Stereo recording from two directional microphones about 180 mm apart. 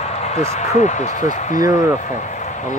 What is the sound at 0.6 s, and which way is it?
Speech, 40° left (ahead or behind).